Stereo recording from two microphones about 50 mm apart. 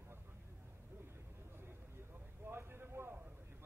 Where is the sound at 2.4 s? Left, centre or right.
Right.